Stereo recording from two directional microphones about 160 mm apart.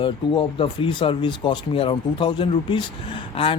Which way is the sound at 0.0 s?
30° left (ahead or behind).